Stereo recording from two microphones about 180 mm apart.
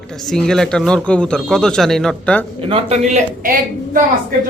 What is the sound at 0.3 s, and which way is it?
A man's voice, 5° left (ahead or behind).